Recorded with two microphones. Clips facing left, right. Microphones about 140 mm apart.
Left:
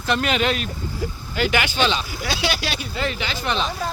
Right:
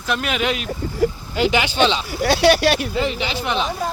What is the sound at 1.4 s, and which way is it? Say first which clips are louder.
Speech: right 4 dB; 25° right (ahead or behind).